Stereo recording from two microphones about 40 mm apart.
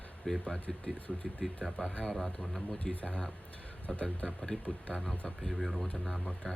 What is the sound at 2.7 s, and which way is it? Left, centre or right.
Speech, left.